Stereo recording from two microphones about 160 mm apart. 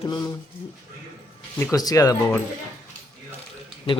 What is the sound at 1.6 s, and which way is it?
Speech, 20° left (ahead or behind).